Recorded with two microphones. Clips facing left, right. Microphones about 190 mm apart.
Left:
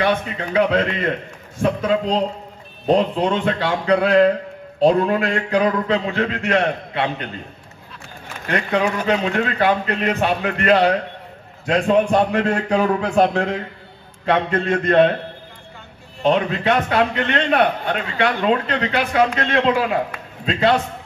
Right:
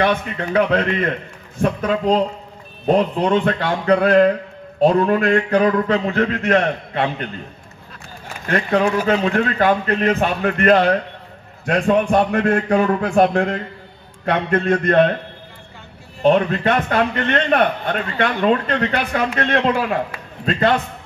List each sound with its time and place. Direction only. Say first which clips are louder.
0.0 s a man's voice: right 1 dB; 50° right (ahead or behind)
8.5 s a man's voice: right 2 dB; 45° right (ahead or behind)
16.2 s a man's voice: right 3 dB; 45° right (ahead or behind)